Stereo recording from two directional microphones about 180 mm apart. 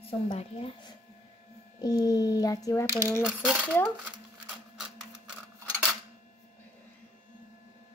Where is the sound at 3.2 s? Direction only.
5° right (ahead or behind).